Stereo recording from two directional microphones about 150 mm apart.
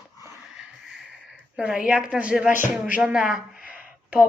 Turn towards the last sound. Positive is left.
turn(degrees=-10)  # may be behind; listen again after turning